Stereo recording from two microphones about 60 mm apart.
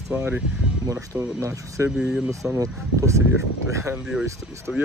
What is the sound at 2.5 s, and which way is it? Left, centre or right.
Speech, right.